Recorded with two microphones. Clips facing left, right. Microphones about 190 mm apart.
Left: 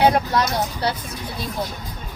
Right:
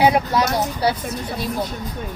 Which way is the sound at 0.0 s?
5° right (ahead or behind).